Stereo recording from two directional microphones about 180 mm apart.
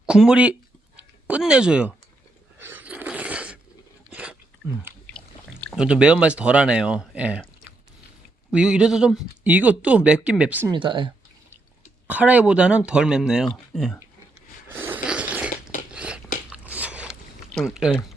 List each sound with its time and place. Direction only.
0.0 s speech: 5° right (ahead or behind)
0.9 s a sound: 5° right (ahead or behind)
5.7 s speech: 5° right (ahead or behind)
8.5 s speech: 5° right (ahead or behind)
10.7 s speech: 25° right (ahead or behind)
12.0 s speech: 10° right (ahead or behind)
14.7 s zipper: 10° right (ahead or behind)
15.9 s a sound: 5° right (ahead or behind)